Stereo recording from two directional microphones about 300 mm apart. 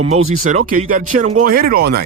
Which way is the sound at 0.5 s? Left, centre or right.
Right.